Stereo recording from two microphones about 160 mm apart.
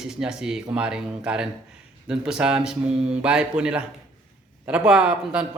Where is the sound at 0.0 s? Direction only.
5° right (ahead or behind).